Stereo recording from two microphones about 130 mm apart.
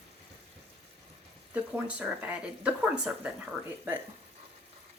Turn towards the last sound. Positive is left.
turn(degrees=-10)  # may be behind; listen again after turning